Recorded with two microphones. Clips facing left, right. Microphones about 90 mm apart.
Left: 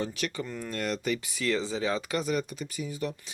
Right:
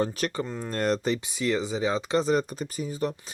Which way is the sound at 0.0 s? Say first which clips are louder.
Right 5 dB; 40° right (ahead or behind).